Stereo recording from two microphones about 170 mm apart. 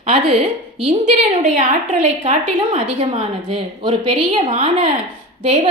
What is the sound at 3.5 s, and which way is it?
A woman's voice, 30° right (ahead or behind).